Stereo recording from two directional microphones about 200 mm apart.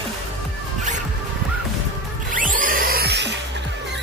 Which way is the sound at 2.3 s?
40° right (ahead or behind).